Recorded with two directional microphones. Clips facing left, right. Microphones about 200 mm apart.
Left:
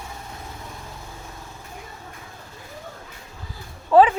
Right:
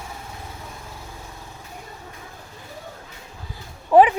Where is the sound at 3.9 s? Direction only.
15° right (ahead or behind).